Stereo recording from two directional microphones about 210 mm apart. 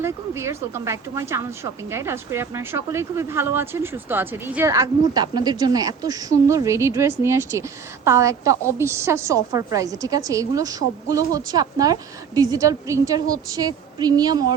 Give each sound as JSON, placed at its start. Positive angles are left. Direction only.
{"t": 0.0, "sound": "speech", "side_deg": -10}